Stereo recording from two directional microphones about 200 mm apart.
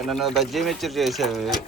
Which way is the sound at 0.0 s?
Centre (ahead or behind).